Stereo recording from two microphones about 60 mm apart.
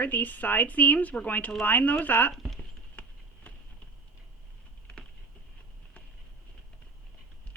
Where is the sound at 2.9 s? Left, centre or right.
Left.